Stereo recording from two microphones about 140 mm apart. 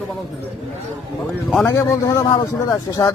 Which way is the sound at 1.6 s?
20° left (ahead or behind).